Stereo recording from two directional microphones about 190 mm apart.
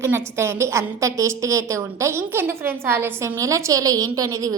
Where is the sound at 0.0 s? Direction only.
10° right (ahead or behind).